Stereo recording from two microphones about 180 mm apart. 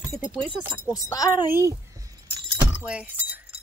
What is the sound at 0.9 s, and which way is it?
Speech, 20° left (ahead or behind).